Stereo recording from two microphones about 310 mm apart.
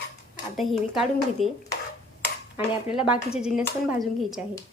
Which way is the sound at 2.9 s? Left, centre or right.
Centre.